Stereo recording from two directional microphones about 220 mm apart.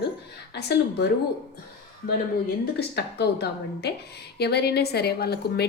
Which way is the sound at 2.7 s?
50° left (ahead or behind).